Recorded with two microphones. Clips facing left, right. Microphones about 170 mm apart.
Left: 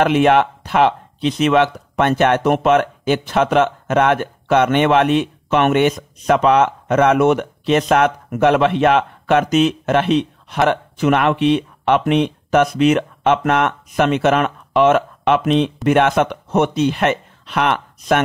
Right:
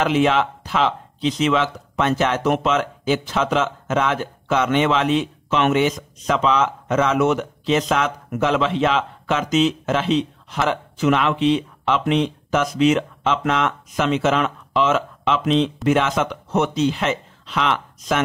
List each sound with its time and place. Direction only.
0.0 s speech: 60° left (ahead or behind)